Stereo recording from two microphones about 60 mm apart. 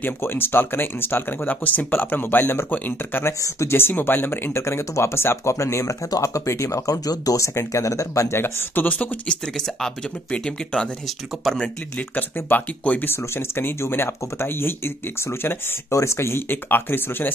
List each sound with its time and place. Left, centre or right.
0.0 s speech: left
3.4 s speech: left
4.6 s speech: left
8.4 s speech: left
8.8 s speech: left
10.3 s speech: centre
11.4 s speech: centre
12.2 s speech: left
13.0 s speech: left
15.9 s speech: left